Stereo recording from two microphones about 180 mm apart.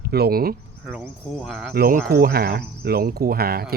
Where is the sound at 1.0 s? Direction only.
Centre (ahead or behind).